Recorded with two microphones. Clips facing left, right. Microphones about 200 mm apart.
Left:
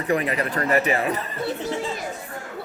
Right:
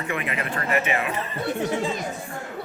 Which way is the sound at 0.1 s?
35° left (ahead or behind).